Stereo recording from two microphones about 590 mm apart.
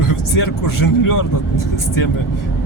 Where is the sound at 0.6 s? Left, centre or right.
Left.